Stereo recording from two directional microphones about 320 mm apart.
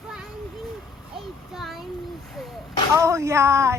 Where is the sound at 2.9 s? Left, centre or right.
Centre.